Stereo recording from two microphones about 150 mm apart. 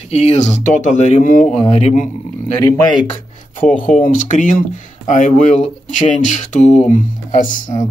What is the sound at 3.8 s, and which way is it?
Speech, 60° left (ahead or behind).